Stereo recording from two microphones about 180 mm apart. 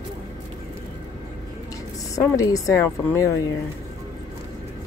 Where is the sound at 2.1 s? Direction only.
20° left (ahead or behind).